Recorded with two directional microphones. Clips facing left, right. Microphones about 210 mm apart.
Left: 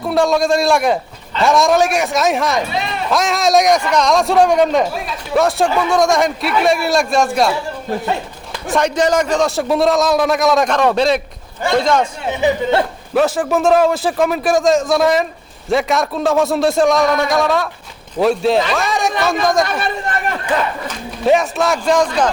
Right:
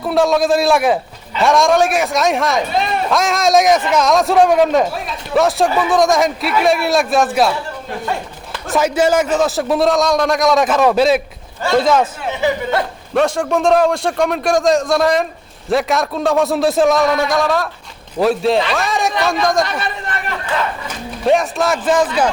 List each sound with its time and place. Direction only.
0.0 s a man's voice: centre (ahead or behind)
8.7 s a man's voice: 5° right (ahead or behind)
12.3 s speech: 20° left (ahead or behind)
13.1 s a man's voice: 5° left (ahead or behind)
19.6 s chatter: 45° left (ahead or behind)
21.2 s a man's voice: centre (ahead or behind)